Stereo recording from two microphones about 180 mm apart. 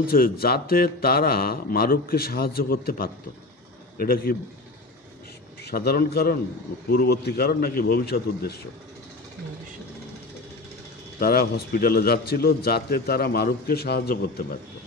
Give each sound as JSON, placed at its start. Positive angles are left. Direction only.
{"t": 0.0, "sound": "a man's voice", "side_deg": 55}
{"t": 5.7, "sound": "a man's voice", "side_deg": 60}
{"t": 11.1, "sound": "a man's voice", "side_deg": 60}